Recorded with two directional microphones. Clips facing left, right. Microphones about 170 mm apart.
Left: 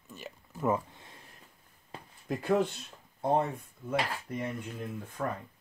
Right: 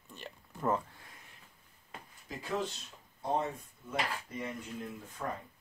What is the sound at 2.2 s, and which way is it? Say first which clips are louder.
Speech: left 8 dB; 60° left (ahead or behind).